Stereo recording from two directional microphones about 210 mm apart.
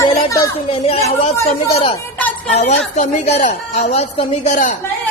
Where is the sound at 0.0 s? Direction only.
15° left (ahead or behind).